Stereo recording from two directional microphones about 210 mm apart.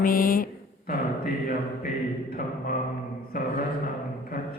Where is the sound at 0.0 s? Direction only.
40° left (ahead or behind).